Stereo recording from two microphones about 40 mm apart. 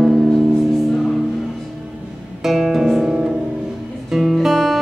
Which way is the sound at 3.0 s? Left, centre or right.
Right.